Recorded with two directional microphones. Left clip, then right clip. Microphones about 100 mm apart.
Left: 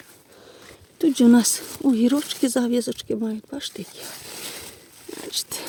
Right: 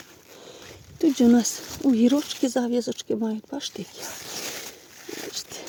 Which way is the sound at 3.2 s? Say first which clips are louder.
Even; 10° left (ahead or behind).